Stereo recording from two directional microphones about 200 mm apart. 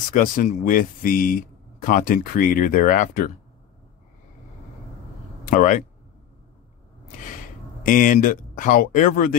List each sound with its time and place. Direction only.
0.1 s speech: 40° left (ahead or behind)
5.4 s speech: 40° left (ahead or behind)
7.8 s speech: 40° left (ahead or behind)